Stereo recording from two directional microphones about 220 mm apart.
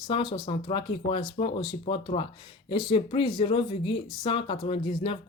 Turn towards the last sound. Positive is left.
turn(degrees=25)  # may be behind; listen again after turning